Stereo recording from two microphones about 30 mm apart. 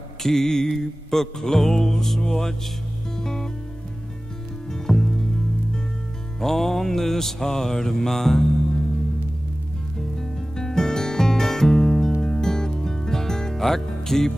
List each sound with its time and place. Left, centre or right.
0.2 s mantra: centre
3.2 s music: centre
4.6 s music: centre
6.4 s mantra: centre
10.1 s music: centre